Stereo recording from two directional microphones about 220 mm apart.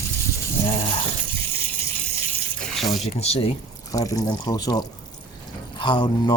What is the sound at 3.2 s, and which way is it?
Speech, 25° left (ahead or behind).